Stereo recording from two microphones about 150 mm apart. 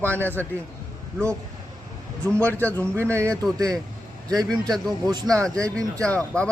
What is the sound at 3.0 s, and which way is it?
Speech, 15° right (ahead or behind).